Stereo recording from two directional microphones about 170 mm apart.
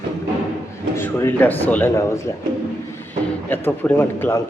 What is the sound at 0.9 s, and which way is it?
A man's voice, 15° left (ahead or behind).